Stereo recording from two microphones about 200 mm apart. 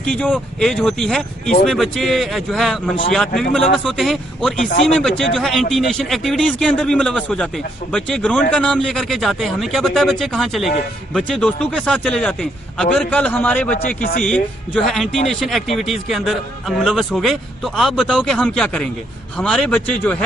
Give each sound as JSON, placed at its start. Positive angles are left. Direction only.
{"t": 0.0, "sound": "speech", "side_deg": 5}